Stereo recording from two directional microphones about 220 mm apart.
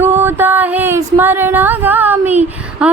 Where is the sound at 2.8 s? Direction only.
5° right (ahead or behind).